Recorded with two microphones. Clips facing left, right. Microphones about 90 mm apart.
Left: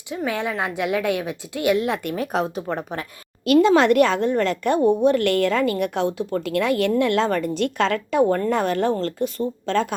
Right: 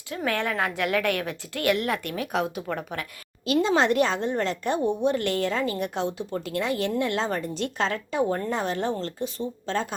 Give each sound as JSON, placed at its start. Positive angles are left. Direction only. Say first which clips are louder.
{"t": 0.3, "sound": "a woman's voice", "louder": "left 1 dB", "side_deg": 15}
{"t": 2.1, "sound": "a woman's voice", "louder": "left 4 dB", "side_deg": 35}
{"t": 3.4, "sound": "speech", "louder": "left 7 dB", "side_deg": 60}